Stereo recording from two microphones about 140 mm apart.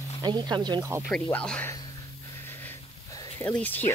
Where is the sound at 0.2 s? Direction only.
30° right (ahead or behind).